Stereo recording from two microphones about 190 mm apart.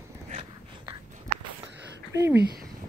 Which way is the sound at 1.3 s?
35° right (ahead or behind).